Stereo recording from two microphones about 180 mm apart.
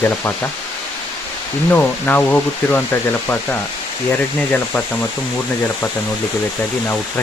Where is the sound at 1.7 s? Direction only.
10° left (ahead or behind).